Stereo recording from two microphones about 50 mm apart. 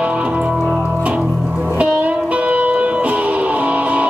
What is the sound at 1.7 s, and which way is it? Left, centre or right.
Music, right.